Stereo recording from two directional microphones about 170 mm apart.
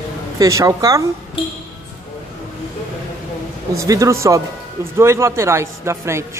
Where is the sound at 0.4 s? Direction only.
20° right (ahead or behind).